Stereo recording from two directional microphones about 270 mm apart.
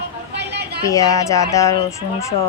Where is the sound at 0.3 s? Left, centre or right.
Right.